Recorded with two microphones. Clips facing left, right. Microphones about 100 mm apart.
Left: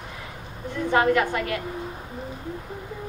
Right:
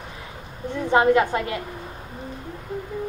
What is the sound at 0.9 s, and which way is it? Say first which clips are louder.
Speech: right 3 dB; 20° right (ahead or behind).